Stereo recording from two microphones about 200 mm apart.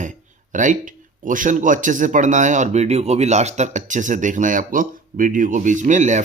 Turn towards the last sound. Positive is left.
turn(degrees=-35)  # may be behind; listen again after turning